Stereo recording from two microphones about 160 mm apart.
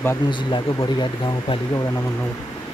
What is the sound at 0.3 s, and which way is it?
Speech, 30° left (ahead or behind).